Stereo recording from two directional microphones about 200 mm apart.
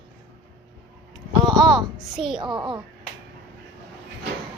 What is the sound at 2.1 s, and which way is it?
Speech, centre (ahead or behind).